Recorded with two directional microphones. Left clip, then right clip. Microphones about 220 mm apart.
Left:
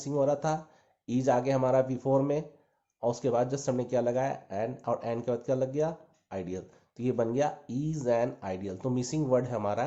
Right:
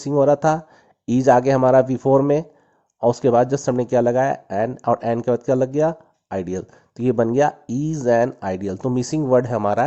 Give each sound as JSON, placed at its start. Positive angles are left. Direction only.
{"t": 0.0, "sound": "speech", "side_deg": -45}